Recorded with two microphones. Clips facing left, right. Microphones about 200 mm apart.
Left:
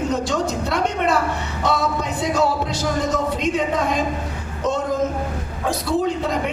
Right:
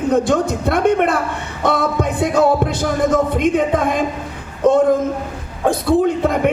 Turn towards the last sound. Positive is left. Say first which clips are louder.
# right 6 dB
turn(degrees=-55)  # may be behind; listen again after turning